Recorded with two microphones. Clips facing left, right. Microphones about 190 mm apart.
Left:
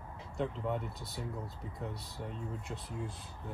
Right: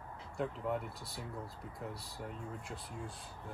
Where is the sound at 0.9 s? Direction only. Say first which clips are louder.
Left 3 dB; 25° left (ahead or behind).